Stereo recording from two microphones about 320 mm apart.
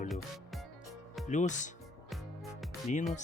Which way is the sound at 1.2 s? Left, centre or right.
Left.